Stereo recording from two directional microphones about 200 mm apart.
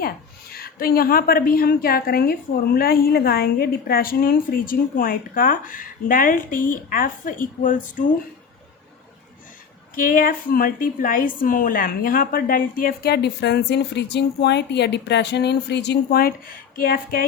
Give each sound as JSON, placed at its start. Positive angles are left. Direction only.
{"t": 0.5, "sound": "a woman's voice", "side_deg": 50}
{"t": 9.9, "sound": "a woman's voice", "side_deg": 45}